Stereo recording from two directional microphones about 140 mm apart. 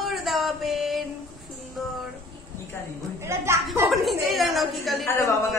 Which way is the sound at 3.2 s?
20° right (ahead or behind).